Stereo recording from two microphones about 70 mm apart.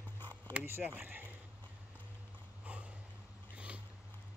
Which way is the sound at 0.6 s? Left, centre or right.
Right.